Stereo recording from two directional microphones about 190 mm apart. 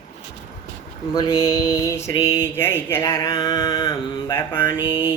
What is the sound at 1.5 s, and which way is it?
Mantra, 15° left (ahead or behind).